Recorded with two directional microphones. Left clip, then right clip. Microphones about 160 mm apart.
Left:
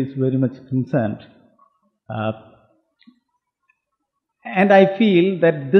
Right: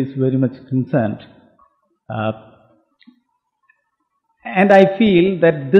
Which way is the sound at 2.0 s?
35° right (ahead or behind).